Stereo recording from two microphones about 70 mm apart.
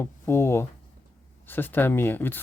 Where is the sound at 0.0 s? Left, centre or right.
Left.